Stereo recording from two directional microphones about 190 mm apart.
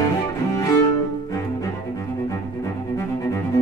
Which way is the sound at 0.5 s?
20° left (ahead or behind).